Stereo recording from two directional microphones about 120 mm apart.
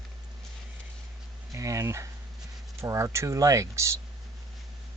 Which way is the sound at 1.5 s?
25° right (ahead or behind).